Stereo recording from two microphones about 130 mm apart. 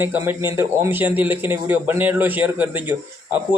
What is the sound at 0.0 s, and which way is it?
A man's voice, 15° right (ahead or behind).